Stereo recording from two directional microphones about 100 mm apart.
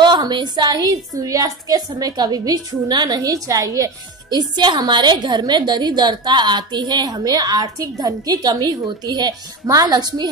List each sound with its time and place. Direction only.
0.0 s a woman's voice: 45° right (ahead or behind)